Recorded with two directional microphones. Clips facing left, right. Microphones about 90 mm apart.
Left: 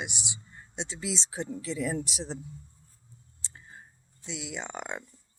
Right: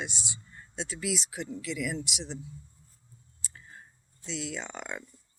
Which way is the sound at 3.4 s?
25° left (ahead or behind).